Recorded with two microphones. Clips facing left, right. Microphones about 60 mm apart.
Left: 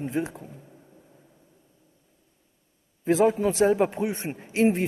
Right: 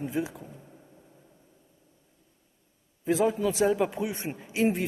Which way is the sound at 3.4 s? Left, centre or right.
Left.